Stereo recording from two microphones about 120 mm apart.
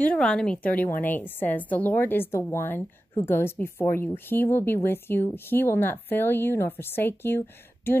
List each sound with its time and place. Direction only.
0.0 s a woman's voice: 10° left (ahead or behind)